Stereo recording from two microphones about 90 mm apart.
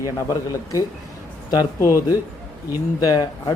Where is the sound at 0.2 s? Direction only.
35° left (ahead or behind).